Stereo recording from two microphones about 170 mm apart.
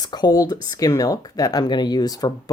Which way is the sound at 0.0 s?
25° left (ahead or behind).